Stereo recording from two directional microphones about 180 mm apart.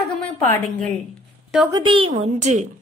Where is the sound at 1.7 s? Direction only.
30° right (ahead or behind).